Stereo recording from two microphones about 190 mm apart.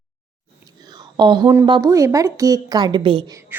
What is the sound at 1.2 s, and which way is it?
A woman's voice, 25° right (ahead or behind).